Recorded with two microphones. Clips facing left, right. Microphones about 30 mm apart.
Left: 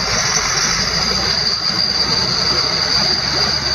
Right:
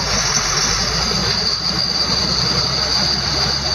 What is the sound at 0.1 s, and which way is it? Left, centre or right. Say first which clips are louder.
Vehicle: left 1 dB; centre.